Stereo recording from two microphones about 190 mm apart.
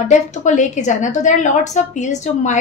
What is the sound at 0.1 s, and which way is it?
A woman's voice, 40° left (ahead or behind).